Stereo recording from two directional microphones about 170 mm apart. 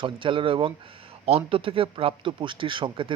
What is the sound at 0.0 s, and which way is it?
Speech, 30° right (ahead or behind).